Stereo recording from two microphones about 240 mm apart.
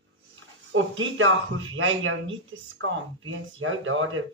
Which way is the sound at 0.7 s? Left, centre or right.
Right.